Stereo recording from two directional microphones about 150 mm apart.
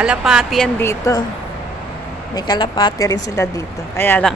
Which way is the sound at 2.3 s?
25° left (ahead or behind).